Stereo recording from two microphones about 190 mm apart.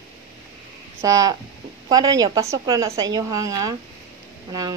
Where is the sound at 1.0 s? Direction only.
15° right (ahead or behind).